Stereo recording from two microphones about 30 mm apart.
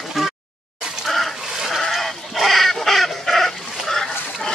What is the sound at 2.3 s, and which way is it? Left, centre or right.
Fowl, centre.